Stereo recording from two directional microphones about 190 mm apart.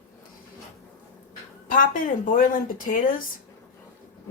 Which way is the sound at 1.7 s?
45° left (ahead or behind).